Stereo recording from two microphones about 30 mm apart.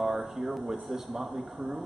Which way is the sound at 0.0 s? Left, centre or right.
Centre.